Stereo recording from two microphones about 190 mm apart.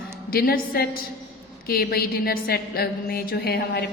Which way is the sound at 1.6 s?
55° left (ahead or behind).